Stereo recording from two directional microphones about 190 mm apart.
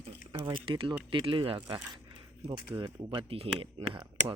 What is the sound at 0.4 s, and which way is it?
Speech, 25° right (ahead or behind).